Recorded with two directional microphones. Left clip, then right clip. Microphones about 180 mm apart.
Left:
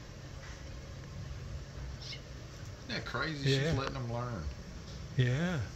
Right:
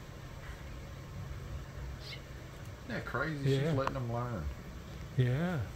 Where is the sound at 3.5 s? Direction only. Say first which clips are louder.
Left 1 dB; 5° right (ahead or behind).